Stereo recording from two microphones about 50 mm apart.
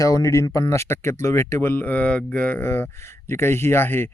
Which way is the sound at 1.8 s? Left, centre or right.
Left.